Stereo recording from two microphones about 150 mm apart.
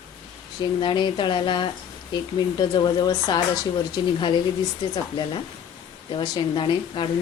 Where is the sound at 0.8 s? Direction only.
30° left (ahead or behind).